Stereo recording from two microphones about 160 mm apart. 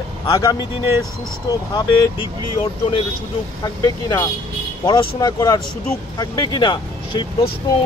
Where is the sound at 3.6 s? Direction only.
25° left (ahead or behind).